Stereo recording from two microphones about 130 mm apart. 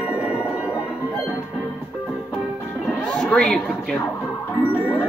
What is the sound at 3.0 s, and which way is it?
Speech, 10° left (ahead or behind).